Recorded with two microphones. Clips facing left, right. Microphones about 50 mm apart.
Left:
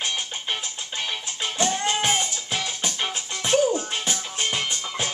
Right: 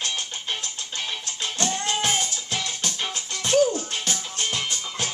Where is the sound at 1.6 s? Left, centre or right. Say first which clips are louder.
Left 2 dB; centre.